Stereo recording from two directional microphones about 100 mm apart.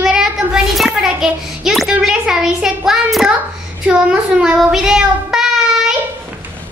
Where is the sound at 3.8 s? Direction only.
10° right (ahead or behind).